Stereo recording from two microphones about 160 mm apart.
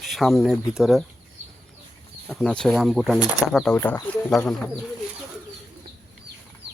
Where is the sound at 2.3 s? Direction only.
5° left (ahead or behind).